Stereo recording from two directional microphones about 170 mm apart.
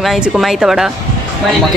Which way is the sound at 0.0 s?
Centre (ahead or behind).